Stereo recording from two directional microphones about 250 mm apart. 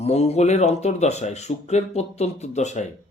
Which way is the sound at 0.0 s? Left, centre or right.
Left.